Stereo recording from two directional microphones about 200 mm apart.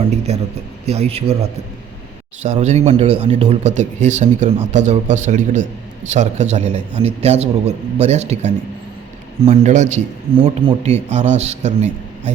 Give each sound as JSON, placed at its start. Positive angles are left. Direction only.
{"t": 0.0, "sound": "speech", "side_deg": -30}